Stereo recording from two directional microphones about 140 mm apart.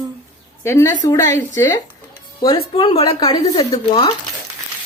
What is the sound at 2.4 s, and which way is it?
Speech, 40° left (ahead or behind).